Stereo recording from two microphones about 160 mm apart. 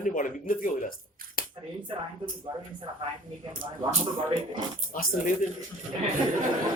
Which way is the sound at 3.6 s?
60° right (ahead or behind).